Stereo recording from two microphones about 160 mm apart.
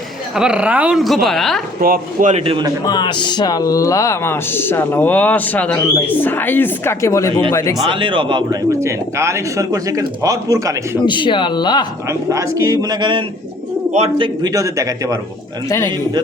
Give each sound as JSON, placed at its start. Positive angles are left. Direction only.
{"t": 0.3, "sound": "speech", "side_deg": -5}
{"t": 1.8, "sound": "speech", "side_deg": -65}
{"t": 2.3, "sound": "speech", "side_deg": -35}
{"t": 2.8, "sound": "speech", "side_deg": 25}
{"t": 7.9, "sound": "speech", "side_deg": -30}
{"t": 8.8, "sound": "speech", "side_deg": -20}
{"t": 11.0, "sound": "speech", "side_deg": 30}
{"t": 12.0, "sound": "speech", "side_deg": -20}